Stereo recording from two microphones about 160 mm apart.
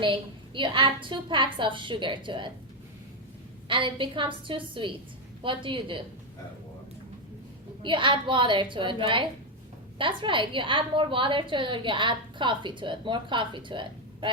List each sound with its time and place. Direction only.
0.0 s a woman's voice: 30° right (ahead or behind)
3.7 s a woman's voice: 30° right (ahead or behind)
7.8 s a woman's voice: 30° right (ahead or behind)